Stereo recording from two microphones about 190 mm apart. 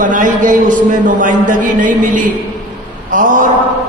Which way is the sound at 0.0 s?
45° right (ahead or behind).